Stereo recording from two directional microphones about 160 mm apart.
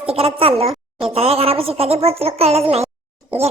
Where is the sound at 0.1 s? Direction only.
35° right (ahead or behind).